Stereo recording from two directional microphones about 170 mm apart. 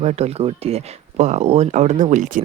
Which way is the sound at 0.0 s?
40° right (ahead or behind).